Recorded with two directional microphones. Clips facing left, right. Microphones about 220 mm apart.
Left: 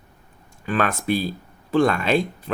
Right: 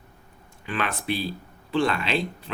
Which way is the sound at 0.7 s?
45° left (ahead or behind).